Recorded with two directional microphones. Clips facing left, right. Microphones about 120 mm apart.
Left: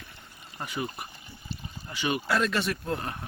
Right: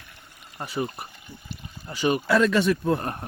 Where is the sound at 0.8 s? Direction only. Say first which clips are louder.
Right 3 dB; centre (ahead or behind).